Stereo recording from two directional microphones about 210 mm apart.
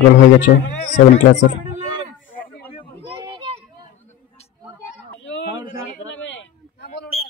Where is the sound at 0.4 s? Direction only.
35° left (ahead or behind).